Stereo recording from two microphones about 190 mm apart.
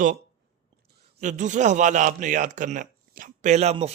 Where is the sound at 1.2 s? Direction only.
40° right (ahead or behind).